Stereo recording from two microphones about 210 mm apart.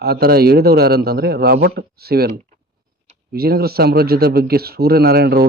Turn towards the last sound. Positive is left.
turn(degrees=-50)  # may be behind; listen again after turning